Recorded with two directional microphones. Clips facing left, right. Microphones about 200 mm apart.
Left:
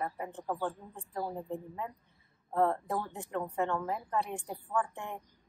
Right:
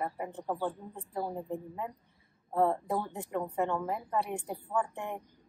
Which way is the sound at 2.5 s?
10° right (ahead or behind).